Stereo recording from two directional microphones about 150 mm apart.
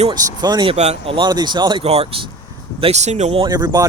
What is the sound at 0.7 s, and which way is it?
Speech, 45° right (ahead or behind).